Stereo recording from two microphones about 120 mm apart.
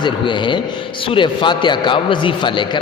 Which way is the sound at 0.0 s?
40° left (ahead or behind).